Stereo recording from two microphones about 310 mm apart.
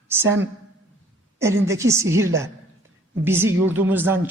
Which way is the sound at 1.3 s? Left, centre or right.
Centre.